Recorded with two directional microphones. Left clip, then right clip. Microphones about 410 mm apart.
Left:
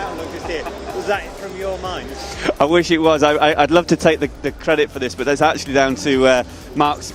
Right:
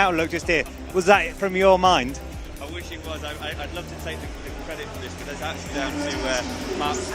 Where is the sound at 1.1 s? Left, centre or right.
Right.